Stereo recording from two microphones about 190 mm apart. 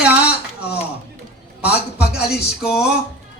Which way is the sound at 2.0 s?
60° left (ahead or behind).